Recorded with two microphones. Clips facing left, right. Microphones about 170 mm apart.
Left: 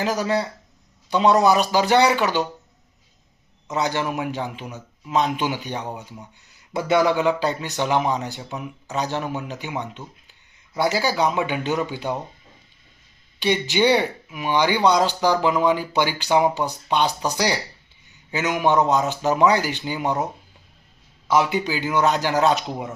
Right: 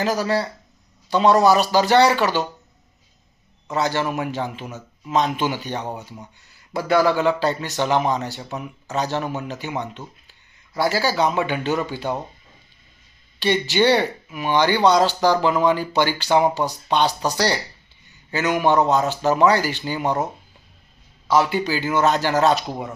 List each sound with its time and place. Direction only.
0.0 s speech: 15° left (ahead or behind)
3.7 s speech: 15° left (ahead or behind)
4.0 s a man's voice: 5° left (ahead or behind)
8.9 s speech: 15° left (ahead or behind)
11.0 s speech: 15° left (ahead or behind)
13.4 s speech: 10° left (ahead or behind)
18.3 s speech: 15° left (ahead or behind)
21.2 s speech: 15° left (ahead or behind)